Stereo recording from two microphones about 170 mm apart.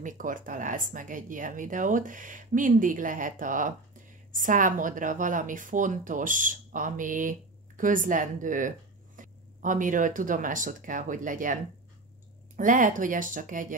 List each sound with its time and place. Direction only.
0.0 s a woman's voice: 50° right (ahead or behind)
12.5 s a woman's voice: 50° right (ahead or behind)